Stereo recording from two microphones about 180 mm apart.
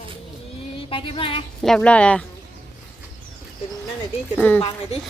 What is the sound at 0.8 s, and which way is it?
Speech, 30° left (ahead or behind).